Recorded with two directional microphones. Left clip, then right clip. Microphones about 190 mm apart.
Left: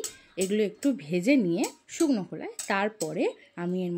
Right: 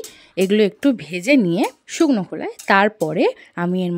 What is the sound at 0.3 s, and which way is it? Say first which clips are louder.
Speech: right 11 dB; 50° right (ahead or behind).